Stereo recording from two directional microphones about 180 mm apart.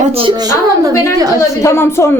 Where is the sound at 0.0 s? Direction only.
30° right (ahead or behind).